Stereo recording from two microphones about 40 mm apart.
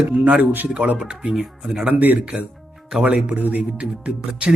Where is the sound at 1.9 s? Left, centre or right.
Right.